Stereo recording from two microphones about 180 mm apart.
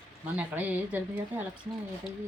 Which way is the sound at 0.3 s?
10° right (ahead or behind).